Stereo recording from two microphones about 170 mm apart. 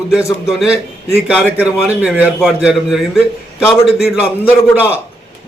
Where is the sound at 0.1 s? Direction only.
5° right (ahead or behind).